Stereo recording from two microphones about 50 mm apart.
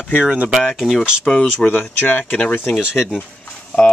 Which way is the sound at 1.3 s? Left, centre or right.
Centre.